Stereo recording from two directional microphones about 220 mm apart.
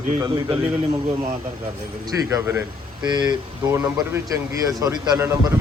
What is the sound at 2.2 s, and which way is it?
A man's voice, 10° right (ahead or behind).